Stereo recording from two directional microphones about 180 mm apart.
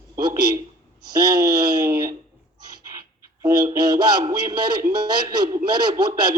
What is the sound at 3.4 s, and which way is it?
Speech, 20° right (ahead or behind).